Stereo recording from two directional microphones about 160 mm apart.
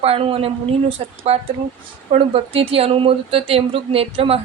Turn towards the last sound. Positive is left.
turn(degrees=-35)  # may be behind; listen again after turning